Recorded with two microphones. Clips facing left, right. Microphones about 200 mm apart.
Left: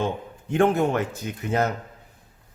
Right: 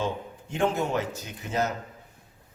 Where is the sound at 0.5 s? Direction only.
55° left (ahead or behind).